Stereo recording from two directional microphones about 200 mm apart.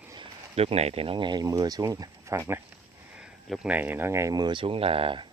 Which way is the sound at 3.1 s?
Centre (ahead or behind).